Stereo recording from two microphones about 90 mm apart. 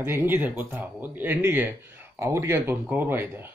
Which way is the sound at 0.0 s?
25° right (ahead or behind).